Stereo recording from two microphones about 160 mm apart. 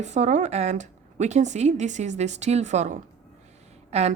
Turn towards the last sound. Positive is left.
turn(degrees=-40)  # may be behind; listen again after turning